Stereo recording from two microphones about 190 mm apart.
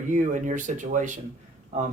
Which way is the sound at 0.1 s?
40° right (ahead or behind).